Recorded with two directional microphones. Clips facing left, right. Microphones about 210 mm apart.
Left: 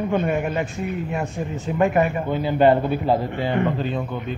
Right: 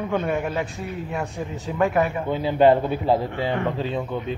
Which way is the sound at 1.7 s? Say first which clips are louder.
Left 2 dB; 5° left (ahead or behind).